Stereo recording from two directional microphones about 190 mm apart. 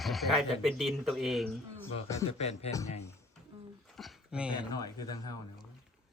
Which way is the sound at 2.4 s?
35° left (ahead or behind).